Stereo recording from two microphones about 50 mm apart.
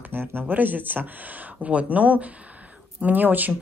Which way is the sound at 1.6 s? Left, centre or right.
Right.